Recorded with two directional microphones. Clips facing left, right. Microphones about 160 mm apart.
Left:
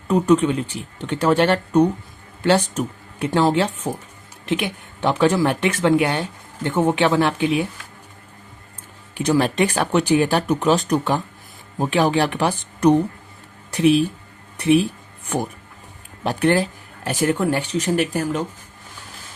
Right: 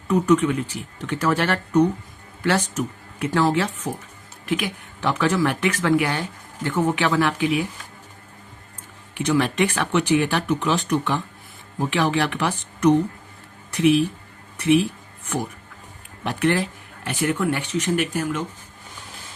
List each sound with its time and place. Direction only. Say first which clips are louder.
0.1 s speech: left 2 dB; 30° left (ahead or behind)
9.1 s speech: left 2 dB; 35° left (ahead or behind)
16.2 s speech: left 3 dB; 35° left (ahead or behind)